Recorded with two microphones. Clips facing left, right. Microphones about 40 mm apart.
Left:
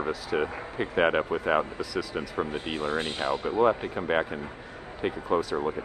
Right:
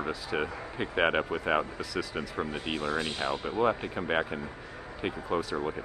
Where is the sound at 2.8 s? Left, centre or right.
Left.